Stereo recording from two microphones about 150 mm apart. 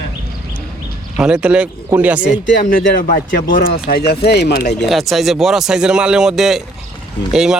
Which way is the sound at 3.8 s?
90° left.